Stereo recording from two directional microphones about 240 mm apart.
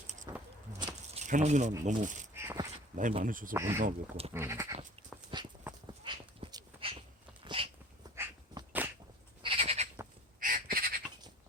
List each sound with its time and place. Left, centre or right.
0.3 s a sound: centre
1.8 s speech: right
2.3 s a sound: centre
2.9 s speech: right
3.5 s speech: centre
3.8 s speech: right
4.4 s sheep: centre
5.3 s dog: centre
7.4 s cat: right
8.1 s dog: centre
9.4 s goat: right
10.4 s crow: right